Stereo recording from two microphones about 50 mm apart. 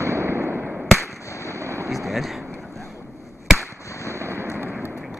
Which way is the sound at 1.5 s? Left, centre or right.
Right.